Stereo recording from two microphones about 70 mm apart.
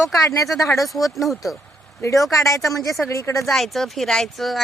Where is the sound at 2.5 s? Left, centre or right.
Left.